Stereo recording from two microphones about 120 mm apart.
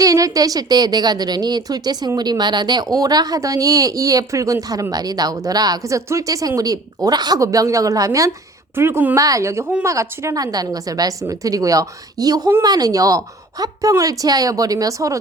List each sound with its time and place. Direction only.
0.0 s a woman's voice: 30° right (ahead or behind)